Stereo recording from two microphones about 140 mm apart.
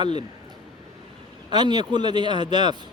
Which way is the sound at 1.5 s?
30° right (ahead or behind).